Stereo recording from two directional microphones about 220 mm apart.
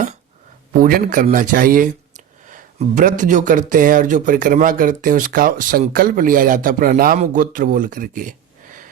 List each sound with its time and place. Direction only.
0.8 s speech: 40° right (ahead or behind)